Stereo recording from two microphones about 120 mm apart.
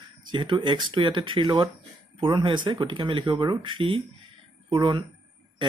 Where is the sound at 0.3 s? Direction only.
40° right (ahead or behind).